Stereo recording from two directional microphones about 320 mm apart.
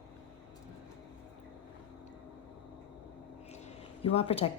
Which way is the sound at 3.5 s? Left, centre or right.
Centre.